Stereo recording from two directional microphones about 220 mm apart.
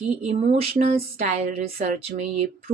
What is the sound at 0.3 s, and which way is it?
Speech, 30° right (ahead or behind).